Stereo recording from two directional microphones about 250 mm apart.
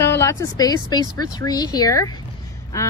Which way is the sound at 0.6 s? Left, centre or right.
Centre.